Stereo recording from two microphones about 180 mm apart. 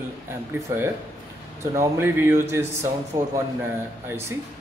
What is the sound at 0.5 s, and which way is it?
A man's voice, 10° right (ahead or behind).